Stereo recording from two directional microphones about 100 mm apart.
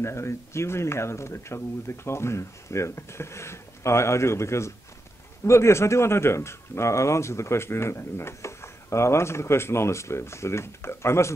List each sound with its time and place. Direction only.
0.0 s speech: 25° left (ahead or behind)